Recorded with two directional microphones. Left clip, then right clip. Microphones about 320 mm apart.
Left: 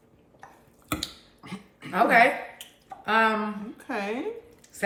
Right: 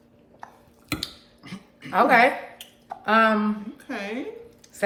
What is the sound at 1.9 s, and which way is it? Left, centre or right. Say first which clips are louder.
A woman's voice: right 2 dB; centre.